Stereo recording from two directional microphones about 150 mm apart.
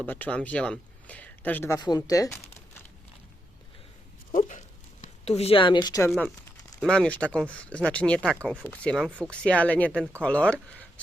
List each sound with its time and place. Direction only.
0.0 s speech: 10° left (ahead or behind)
1.8 s speech: 25° left (ahead or behind)
4.3 s a sound: 55° left (ahead or behind); by 6.0 s 30° left (ahead or behind)
6.8 s speech: 5° left (ahead or behind)
9.0 s speech: 10° right (ahead or behind)
9.3 s speech: 5° left (ahead or behind)